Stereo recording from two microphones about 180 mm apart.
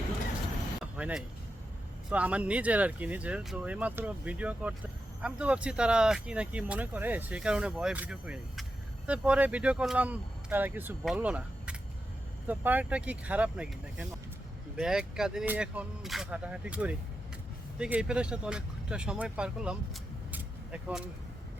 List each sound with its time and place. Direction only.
0.9 s speech: 5° right (ahead or behind)